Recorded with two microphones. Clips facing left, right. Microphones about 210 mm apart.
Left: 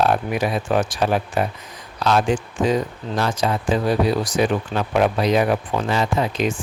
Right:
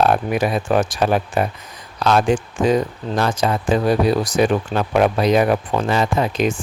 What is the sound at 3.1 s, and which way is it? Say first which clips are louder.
Speech: right 2 dB; 50° right (ahead or behind).